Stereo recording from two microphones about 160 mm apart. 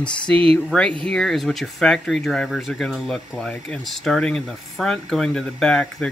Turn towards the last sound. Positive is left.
turn(degrees=5)  # may be behind; listen again after turning